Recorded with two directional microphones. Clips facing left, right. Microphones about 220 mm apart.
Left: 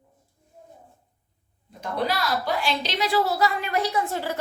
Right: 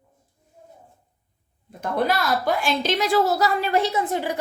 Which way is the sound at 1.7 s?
50° right (ahead or behind).